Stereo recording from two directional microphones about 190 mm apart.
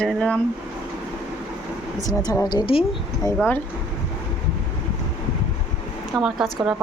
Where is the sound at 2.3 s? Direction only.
20° left (ahead or behind).